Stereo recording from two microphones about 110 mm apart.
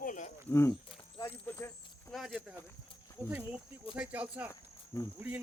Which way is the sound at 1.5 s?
20° left (ahead or behind).